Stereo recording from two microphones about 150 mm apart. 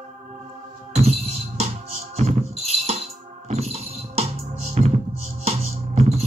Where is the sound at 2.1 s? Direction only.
45° right (ahead or behind).